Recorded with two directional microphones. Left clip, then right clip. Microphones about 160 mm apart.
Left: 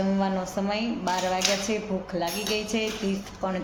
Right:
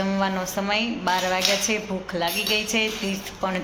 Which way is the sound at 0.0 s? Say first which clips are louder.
Right 2 dB; 5° left (ahead or behind).